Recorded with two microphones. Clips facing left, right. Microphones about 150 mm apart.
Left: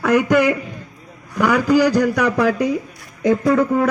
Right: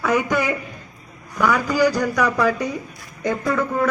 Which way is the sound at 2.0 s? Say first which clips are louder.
Left 3 dB; 85° left.